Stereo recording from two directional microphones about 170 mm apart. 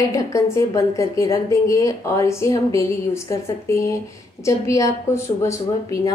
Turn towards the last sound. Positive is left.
turn(degrees=20)  # may be behind; listen again after turning